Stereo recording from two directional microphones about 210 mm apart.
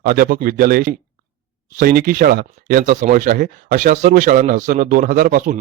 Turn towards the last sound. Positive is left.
turn(degrees=-40)  # may be behind; listen again after turning